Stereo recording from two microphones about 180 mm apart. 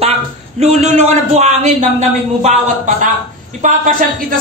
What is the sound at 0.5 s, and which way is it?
Speech, 40° right (ahead or behind).